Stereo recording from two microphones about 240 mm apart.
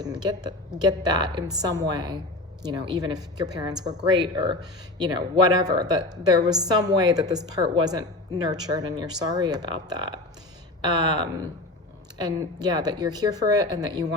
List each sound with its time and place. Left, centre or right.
0.0 s a woman's voice: centre